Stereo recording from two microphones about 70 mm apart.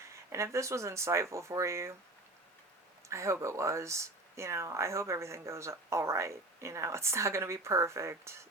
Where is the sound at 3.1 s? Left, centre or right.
Right.